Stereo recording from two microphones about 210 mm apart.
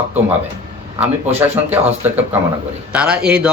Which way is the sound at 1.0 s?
10° right (ahead or behind).